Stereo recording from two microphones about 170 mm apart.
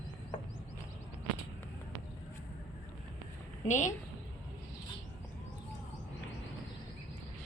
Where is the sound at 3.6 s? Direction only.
45° left (ahead or behind).